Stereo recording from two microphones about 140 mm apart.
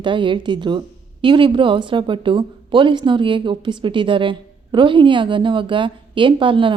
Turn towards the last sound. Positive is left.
turn(degrees=-35)  # may be behind; listen again after turning